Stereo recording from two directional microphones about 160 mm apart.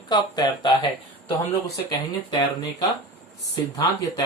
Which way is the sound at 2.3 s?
30° left (ahead or behind).